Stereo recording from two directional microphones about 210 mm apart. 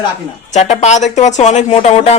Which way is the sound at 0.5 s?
30° left (ahead or behind).